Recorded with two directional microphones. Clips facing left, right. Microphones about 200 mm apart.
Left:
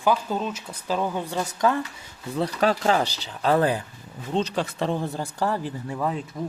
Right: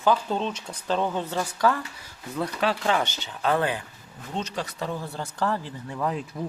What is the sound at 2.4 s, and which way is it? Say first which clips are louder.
Speech: left 3 dB; 40° left (ahead or behind).